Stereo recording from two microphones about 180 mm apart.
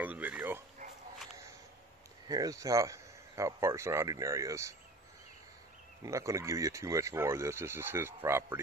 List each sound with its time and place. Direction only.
0.0 s a sound: 10° right (ahead or behind)
2.2 s speech: 20° right (ahead or behind)
6.0 s speech: 15° right (ahead or behind)